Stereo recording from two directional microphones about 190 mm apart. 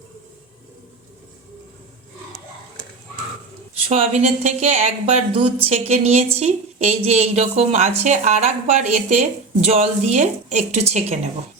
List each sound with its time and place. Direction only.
3.8 s a woman's voice: 30° right (ahead or behind)